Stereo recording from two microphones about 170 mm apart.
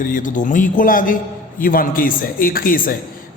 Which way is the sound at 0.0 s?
50° left (ahead or behind).